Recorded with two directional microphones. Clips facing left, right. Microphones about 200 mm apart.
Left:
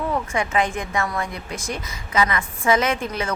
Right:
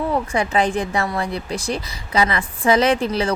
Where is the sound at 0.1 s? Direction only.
35° right (ahead or behind).